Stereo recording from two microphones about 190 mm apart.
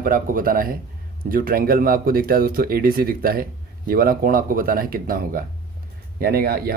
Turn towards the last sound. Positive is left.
turn(degrees=-55)  # may be behind; listen again after turning